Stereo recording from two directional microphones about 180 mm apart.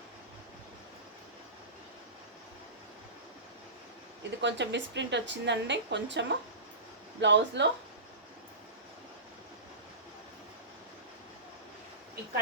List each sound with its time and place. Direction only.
4.4 s a woman's voice: 80° right